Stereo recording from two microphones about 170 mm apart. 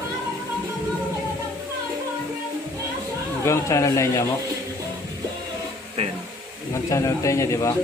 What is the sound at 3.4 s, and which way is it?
Speech, 15° left (ahead or behind).